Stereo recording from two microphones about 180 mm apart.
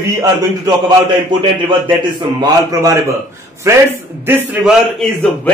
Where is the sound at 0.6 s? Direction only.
25° right (ahead or behind).